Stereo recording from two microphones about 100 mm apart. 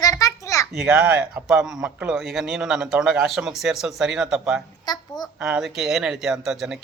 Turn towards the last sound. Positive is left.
turn(degrees=-5)  # may be behind; listen again after turning